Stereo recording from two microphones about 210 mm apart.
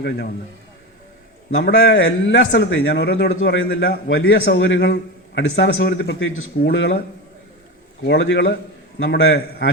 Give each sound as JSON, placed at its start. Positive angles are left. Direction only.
{"t": 1.5, "sound": "a man's voice", "side_deg": 65}
{"t": 8.0, "sound": "a man's voice", "side_deg": 60}